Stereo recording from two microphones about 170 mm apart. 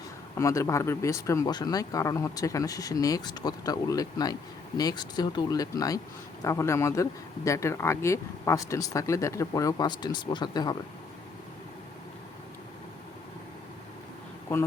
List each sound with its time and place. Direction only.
0.3 s speech: 20° left (ahead or behind)